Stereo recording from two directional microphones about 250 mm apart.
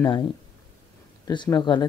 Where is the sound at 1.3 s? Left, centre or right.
Centre.